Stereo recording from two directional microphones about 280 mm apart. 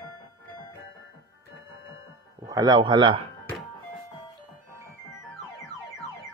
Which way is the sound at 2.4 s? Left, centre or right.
Centre.